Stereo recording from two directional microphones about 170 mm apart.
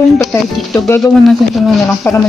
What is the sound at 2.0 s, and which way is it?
Speech, 15° left (ahead or behind).